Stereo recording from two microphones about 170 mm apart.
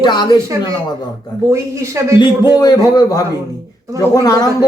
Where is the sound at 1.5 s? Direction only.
15° right (ahead or behind).